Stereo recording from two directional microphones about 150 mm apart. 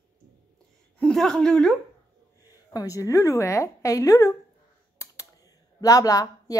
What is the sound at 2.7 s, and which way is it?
A woman's voice, 20° left (ahead or behind).